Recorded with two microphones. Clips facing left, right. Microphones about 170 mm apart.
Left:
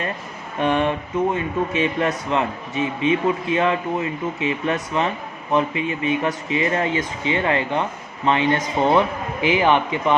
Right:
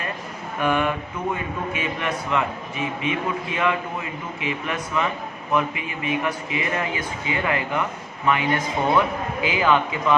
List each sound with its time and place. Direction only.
0.6 s speech: 30° left (ahead or behind)